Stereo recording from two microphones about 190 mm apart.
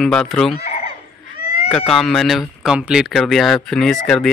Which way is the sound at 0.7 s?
35° left (ahead or behind).